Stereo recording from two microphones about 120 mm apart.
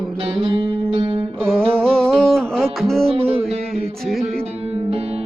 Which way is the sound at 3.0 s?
55° right (ahead or behind).